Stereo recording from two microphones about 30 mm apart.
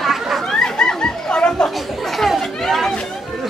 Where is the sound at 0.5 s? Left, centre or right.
Left.